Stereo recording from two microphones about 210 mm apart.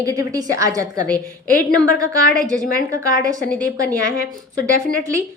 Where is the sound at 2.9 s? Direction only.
15° right (ahead or behind).